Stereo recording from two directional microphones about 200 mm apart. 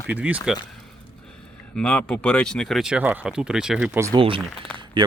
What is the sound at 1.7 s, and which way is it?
Speech, 5° left (ahead or behind).